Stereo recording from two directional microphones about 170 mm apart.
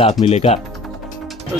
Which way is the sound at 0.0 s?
35° left (ahead or behind).